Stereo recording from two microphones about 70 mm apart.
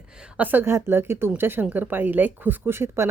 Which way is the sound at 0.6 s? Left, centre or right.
Right.